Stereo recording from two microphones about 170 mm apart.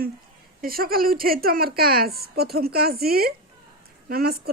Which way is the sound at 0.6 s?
60° right (ahead or behind).